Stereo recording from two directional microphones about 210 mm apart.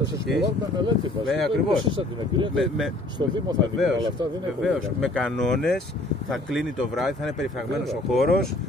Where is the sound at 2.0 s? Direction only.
25° right (ahead or behind).